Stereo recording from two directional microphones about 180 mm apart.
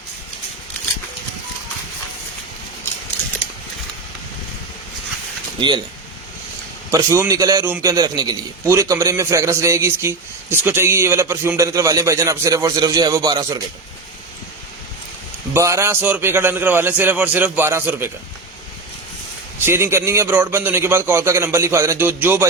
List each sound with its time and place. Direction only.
5.5 s speech: 25° right (ahead or behind)
6.9 s a man's voice: 15° right (ahead or behind)
15.5 s a man's voice: 15° right (ahead or behind)
19.5 s a man's voice: 15° right (ahead or behind)